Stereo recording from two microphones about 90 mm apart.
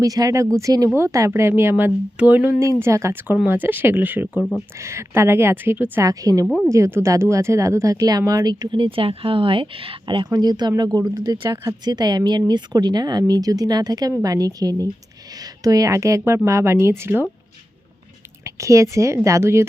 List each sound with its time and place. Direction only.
0.0 s speech: 40° right (ahead or behind)
1.7 s speech: 15° right (ahead or behind)
2.6 s a woman's voice: 30° right (ahead or behind)
4.4 s speech: 30° left (ahead or behind)
4.8 s a woman's voice: 30° right (ahead or behind)
6.0 s speech: 40° right (ahead or behind); by 10.2 s 80° right
10.2 s speech: 45° right (ahead or behind)
11.9 s a woman's voice: 50° right (ahead or behind); by 17.2 s 25° right (ahead or behind)
18.4 s speech: 35° right (ahead or behind)